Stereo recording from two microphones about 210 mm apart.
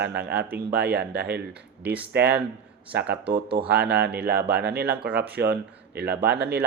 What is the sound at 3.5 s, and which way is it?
Speech, 45° right (ahead or behind).